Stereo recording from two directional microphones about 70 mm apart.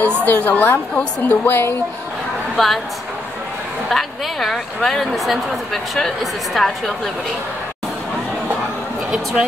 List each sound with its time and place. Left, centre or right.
0.2 s a woman's voice: left
2.5 s a woman's voice: centre
3.9 s a woman's voice: centre